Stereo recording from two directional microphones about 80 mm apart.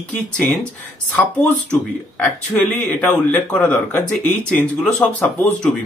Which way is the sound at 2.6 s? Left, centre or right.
Centre.